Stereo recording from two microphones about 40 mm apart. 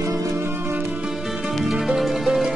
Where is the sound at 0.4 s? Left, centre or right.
Right.